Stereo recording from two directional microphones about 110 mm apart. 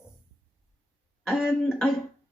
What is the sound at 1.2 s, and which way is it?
Speech, 5° right (ahead or behind).